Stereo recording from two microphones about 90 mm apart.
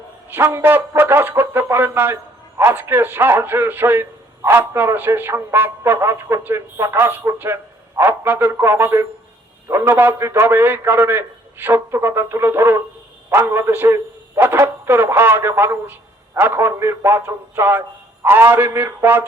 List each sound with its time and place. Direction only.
0.3 s a man's voice: 25° right (ahead or behind)